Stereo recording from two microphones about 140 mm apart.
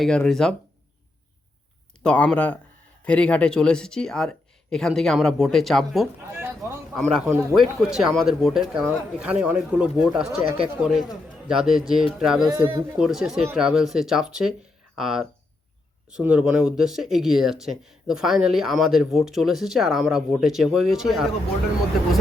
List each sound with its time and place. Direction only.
0.0 s speech: 5° left (ahead or behind)
2.0 s speech: 10° left (ahead or behind)
6.3 s speech: 15° right (ahead or behind)
6.9 s speech: centre (ahead or behind)
12.5 s speech: 15° right (ahead or behind)
13.0 s speech: 5° right (ahead or behind)